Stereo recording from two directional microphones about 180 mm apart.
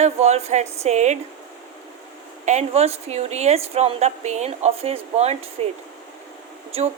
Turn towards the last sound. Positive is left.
turn(degrees=-35)  # may be behind; listen again after turning